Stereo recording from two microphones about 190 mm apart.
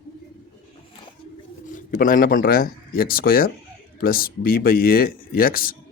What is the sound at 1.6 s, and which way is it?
Speech, 45° left (ahead or behind).